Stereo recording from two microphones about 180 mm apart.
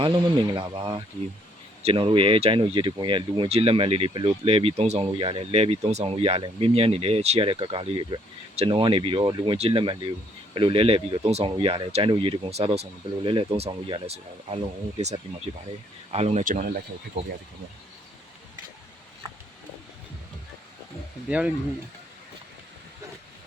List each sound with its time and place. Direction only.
0.0 s speech: 25° right (ahead or behind); by 16.7 s 50° right (ahead or behind)
21.2 s speech: 5° right (ahead or behind)